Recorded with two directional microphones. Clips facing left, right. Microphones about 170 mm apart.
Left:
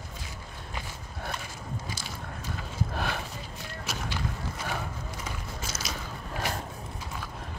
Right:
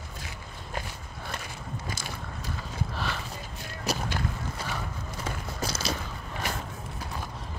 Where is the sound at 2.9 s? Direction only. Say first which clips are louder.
Left 2 dB; 55° left (ahead or behind).